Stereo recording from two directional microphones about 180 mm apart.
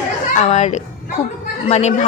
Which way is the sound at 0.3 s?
40° left (ahead or behind).